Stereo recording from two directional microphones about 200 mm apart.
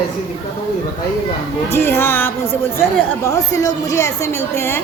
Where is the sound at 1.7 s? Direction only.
10° left (ahead or behind).